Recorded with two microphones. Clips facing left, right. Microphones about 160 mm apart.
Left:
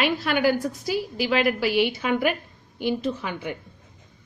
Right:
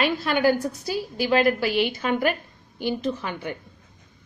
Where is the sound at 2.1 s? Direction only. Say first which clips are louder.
Even; 40° right (ahead or behind).